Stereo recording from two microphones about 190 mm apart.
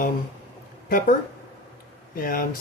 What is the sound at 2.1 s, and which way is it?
Speech, 50° left (ahead or behind).